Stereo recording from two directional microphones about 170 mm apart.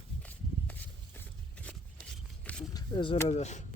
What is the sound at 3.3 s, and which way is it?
Speech, 40° left (ahead or behind).